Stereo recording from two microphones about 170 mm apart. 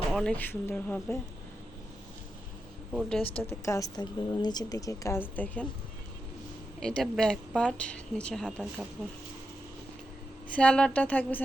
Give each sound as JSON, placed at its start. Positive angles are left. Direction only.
{"t": 0.1, "sound": "speech", "side_deg": 5}
{"t": 2.9, "sound": "speech", "side_deg": 0}
{"t": 3.4, "sound": "a woman's voice", "side_deg": 15}
{"t": 6.7, "sound": "speech", "side_deg": 5}
{"t": 10.5, "sound": "speech", "side_deg": 5}